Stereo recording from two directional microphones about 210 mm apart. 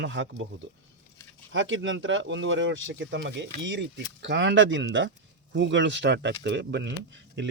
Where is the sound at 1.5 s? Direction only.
65° right (ahead or behind).